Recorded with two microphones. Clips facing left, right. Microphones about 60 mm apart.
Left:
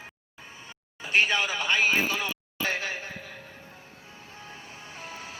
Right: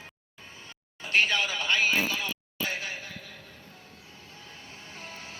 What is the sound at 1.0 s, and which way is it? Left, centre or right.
Speech, centre.